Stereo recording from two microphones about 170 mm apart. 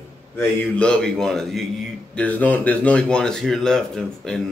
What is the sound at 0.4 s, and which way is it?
Speech, 5° left (ahead or behind).